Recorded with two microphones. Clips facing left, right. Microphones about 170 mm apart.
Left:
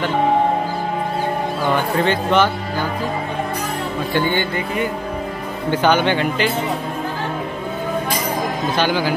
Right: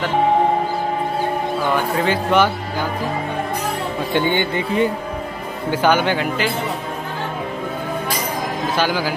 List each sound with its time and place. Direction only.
2.0 s speech: 10° right (ahead or behind)
4.1 s speech: 20° right (ahead or behind)
5.7 s speech: 10° right (ahead or behind)
8.7 s speech: 5° right (ahead or behind)